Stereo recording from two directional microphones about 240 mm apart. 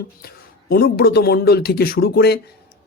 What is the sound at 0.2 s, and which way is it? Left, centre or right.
A man's voice, left.